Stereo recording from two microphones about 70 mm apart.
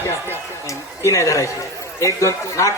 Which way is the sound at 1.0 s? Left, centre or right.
Left.